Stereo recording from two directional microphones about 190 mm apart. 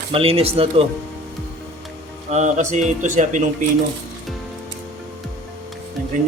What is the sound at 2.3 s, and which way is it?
Speech, 40° right (ahead or behind).